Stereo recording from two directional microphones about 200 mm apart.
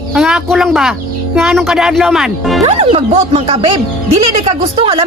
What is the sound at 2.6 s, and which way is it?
A woman's voice, 30° right (ahead or behind).